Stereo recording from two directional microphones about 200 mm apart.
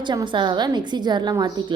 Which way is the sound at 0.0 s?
20° right (ahead or behind).